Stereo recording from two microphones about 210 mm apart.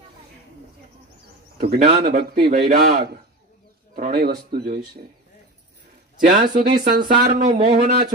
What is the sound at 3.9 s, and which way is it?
Speech, 45° right (ahead or behind).